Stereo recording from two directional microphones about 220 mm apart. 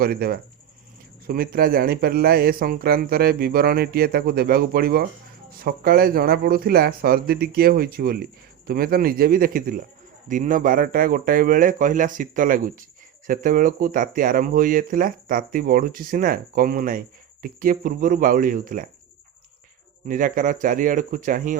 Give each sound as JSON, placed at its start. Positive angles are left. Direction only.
{"t": 0.0, "sound": "speech", "side_deg": -45}
{"t": 20.1, "sound": "speech", "side_deg": -35}